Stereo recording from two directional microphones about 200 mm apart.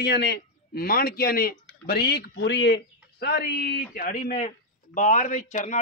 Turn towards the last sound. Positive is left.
turn(degrees=40)  # may be behind; listen again after turning